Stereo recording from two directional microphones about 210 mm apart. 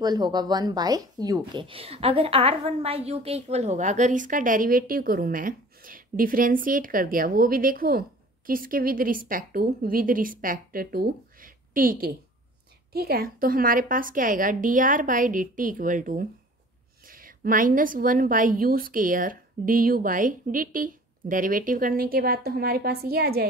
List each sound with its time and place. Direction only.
0.0 s a woman's voice: 20° right (ahead or behind); by 23.5 s 45° right (ahead or behind)